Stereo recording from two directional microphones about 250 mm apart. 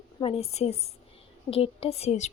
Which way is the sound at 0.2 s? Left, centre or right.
Left.